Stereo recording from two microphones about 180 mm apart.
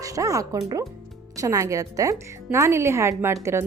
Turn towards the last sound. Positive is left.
turn(degrees=-15)  # may be behind; listen again after turning